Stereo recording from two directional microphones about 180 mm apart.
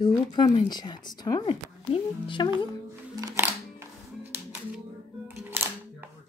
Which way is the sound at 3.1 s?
20° right (ahead or behind).